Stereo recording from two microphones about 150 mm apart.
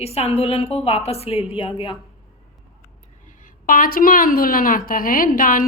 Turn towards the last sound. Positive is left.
turn(degrees=65)  # may be behind; listen again after turning